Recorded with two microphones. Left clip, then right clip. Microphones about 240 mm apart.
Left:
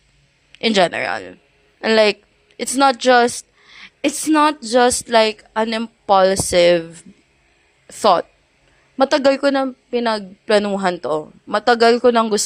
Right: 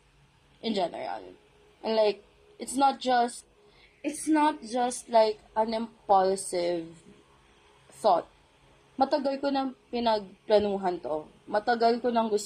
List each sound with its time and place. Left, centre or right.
0.6 s speech: left
9.2 s speech: left
12.1 s speech: left